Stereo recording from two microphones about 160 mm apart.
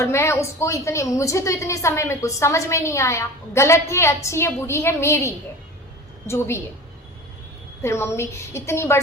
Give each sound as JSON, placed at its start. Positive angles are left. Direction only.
{"t": 0.0, "sound": "a woman's voice", "side_deg": 15}
{"t": 7.8, "sound": "a woman's voice", "side_deg": 15}